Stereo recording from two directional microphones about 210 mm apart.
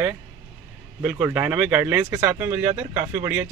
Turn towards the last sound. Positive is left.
turn(degrees=-10)  # may be behind; listen again after turning